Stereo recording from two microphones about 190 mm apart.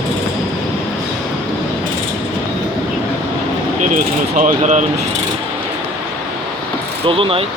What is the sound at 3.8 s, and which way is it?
Speech, 40° right (ahead or behind).